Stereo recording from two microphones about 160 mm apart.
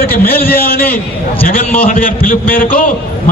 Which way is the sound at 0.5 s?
70° left (ahead or behind).